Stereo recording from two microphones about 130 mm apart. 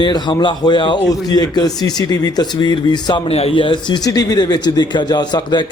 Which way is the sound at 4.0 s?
30° left (ahead or behind).